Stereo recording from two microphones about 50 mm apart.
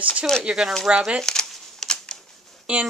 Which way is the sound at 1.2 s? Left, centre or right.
Centre.